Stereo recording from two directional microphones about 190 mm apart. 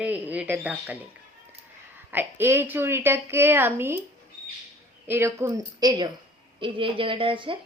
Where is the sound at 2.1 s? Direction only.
10° right (ahead or behind).